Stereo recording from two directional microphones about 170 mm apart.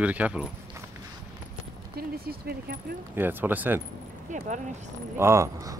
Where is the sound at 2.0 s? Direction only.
60° right (ahead or behind).